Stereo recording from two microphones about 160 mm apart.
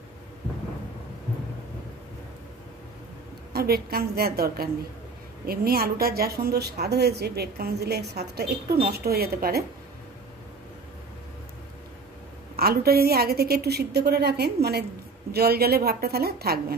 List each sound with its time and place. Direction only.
3.5 s a woman's voice: 75° right (ahead or behind)
12.5 s a woman's voice: 75° right (ahead or behind)
15.3 s a woman's voice: 75° right (ahead or behind)